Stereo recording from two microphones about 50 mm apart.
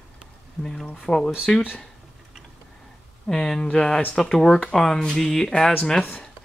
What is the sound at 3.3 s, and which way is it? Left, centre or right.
Speech, centre.